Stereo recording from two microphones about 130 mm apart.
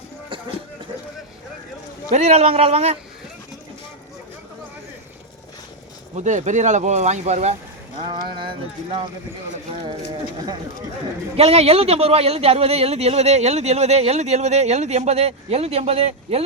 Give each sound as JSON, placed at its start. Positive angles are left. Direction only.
{"t": 2.0, "sound": "speech", "side_deg": -60}
{"t": 6.1, "sound": "speech", "side_deg": -65}
{"t": 7.9, "sound": "speech", "side_deg": -40}
{"t": 11.3, "sound": "speech", "side_deg": -50}